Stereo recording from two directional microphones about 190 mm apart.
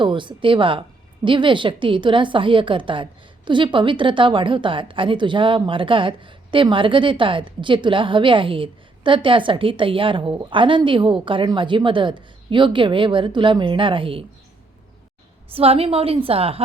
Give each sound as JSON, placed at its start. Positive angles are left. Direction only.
{"t": 0.0, "sound": "speech", "side_deg": -25}
{"t": 15.5, "sound": "a woman's voice", "side_deg": -30}